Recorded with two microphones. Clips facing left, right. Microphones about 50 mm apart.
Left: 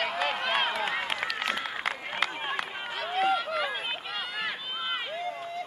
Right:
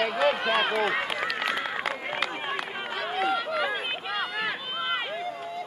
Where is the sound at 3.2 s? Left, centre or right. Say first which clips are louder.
Even; centre.